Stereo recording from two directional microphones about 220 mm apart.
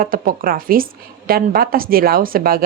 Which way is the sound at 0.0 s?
40° right (ahead or behind).